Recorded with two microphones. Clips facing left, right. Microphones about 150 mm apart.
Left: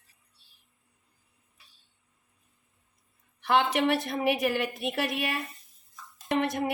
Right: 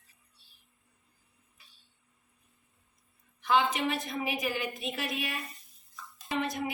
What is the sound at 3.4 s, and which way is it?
Speech, 70° left (ahead or behind).